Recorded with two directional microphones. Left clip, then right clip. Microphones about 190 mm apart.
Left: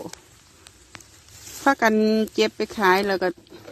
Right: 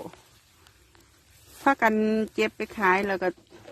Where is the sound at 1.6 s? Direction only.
10° left (ahead or behind).